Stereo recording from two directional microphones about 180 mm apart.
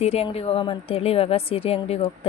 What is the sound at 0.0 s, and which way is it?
Speech, 35° left (ahead or behind).